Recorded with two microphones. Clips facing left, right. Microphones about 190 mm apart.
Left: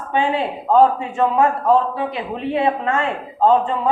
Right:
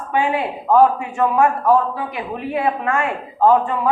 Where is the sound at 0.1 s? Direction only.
25° left (ahead or behind).